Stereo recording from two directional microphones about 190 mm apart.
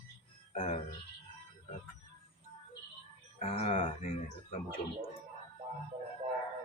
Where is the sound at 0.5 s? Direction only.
35° left (ahead or behind).